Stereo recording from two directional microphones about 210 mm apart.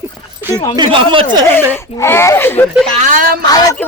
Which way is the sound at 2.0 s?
10° left (ahead or behind).